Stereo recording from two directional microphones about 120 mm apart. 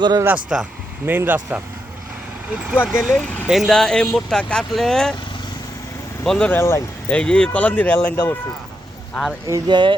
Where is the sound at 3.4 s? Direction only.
5° right (ahead or behind).